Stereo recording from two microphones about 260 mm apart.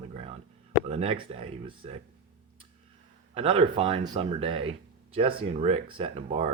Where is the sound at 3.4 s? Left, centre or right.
Right.